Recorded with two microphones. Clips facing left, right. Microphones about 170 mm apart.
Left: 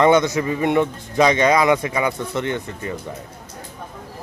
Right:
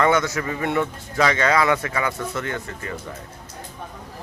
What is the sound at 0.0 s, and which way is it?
Speech, 20° left (ahead or behind).